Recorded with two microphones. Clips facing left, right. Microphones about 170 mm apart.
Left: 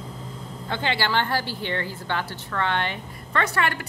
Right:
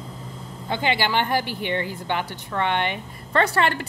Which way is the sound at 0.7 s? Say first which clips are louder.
Right 2 dB; 15° right (ahead or behind).